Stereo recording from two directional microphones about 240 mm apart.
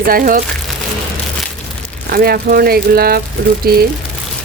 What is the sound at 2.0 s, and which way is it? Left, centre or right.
Speech, right.